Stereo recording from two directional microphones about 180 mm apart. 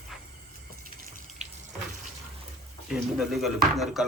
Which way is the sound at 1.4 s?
40° right (ahead or behind).